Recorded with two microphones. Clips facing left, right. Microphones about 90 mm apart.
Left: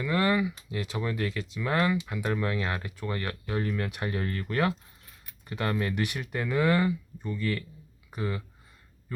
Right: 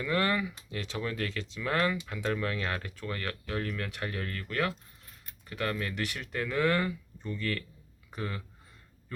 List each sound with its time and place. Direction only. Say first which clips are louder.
0.0 s speech: left 3 dB; 10° left (ahead or behind)